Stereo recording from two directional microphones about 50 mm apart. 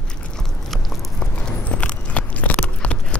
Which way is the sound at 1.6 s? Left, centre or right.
Left.